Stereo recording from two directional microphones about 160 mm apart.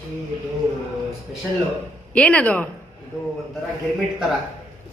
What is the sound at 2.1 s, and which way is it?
Speech, 5° left (ahead or behind).